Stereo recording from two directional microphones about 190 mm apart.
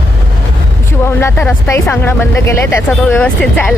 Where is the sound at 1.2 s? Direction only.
10° left (ahead or behind).